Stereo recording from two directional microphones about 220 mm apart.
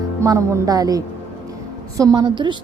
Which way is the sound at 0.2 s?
15° right (ahead or behind).